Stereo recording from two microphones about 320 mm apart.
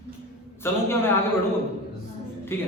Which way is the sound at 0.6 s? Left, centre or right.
Centre.